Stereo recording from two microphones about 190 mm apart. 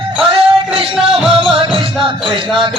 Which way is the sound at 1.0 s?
Centre (ahead or behind).